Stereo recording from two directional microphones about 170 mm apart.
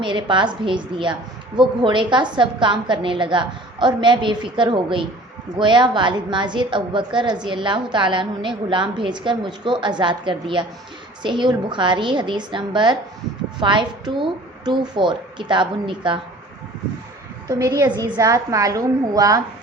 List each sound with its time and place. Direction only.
0.0 s a woman's voice: 30° right (ahead or behind)
17.5 s a woman's voice: 20° right (ahead or behind)